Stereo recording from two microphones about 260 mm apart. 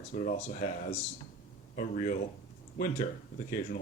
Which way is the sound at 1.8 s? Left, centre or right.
Left.